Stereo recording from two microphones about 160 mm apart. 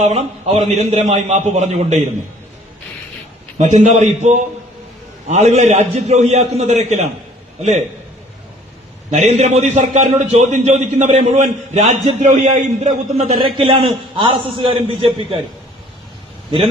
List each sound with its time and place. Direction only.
0.0 s a man's voice: 40° right (ahead or behind)
3.6 s a man's voice: 45° right (ahead or behind)
9.0 s a man's voice: 40° right (ahead or behind)
13.7 s a man's voice: 30° right (ahead or behind)